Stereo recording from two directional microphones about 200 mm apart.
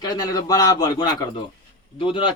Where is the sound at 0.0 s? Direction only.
20° left (ahead or behind).